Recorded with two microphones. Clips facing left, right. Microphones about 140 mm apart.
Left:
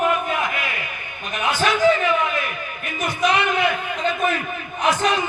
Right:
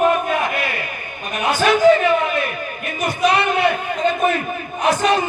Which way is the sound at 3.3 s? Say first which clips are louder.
Right 3 dB; 35° right (ahead or behind).